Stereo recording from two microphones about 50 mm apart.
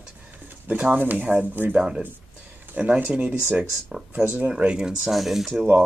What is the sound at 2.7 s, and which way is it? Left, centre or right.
Speech, right.